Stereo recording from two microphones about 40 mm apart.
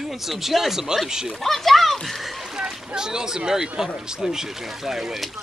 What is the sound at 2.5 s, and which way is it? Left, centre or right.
Boat, centre.